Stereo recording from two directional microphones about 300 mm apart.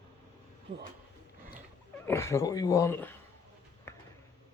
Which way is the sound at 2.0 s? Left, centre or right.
Centre.